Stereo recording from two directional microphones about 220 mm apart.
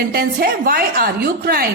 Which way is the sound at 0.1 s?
45° right (ahead or behind).